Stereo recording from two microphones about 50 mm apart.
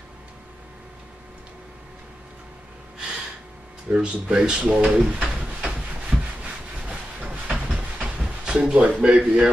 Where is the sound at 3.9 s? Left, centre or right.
Right.